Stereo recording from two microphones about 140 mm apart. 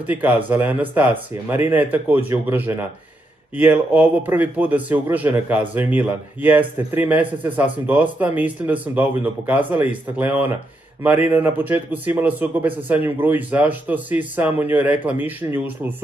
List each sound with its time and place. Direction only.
0.0 s a man's voice: 10° right (ahead or behind)